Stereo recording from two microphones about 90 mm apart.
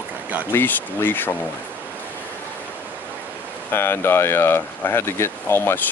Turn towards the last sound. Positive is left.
turn(degrees=25)  # may be behind; listen again after turning